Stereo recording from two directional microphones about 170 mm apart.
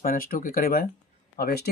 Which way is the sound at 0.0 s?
60° left (ahead or behind).